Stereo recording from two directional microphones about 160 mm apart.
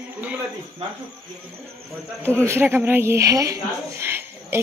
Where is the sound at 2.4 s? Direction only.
15° right (ahead or behind).